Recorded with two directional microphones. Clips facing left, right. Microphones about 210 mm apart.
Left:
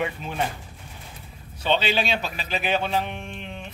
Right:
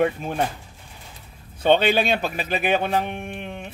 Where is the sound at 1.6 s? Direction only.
55° right (ahead or behind).